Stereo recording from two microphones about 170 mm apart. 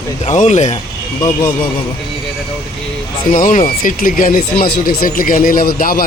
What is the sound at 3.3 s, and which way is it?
Speech, 50° left (ahead or behind).